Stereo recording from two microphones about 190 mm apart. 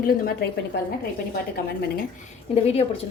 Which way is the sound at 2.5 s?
30° left (ahead or behind).